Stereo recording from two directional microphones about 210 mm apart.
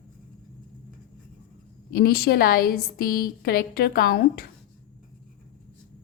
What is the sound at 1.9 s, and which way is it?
A woman's voice, 45° left (ahead or behind).